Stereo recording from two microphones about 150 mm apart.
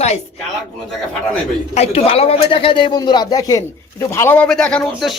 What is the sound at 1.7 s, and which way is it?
A man's voice, 45° left (ahead or behind).